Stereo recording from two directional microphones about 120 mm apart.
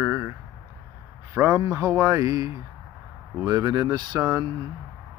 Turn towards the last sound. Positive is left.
turn(degrees=-30)  # may be behind; listen again after turning